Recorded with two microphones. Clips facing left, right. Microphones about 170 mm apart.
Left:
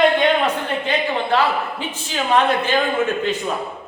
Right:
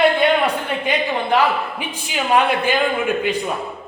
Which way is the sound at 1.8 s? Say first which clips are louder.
Even; 10° right (ahead or behind).